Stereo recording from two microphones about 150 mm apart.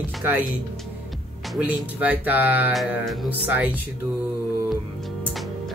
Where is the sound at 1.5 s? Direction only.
10° right (ahead or behind).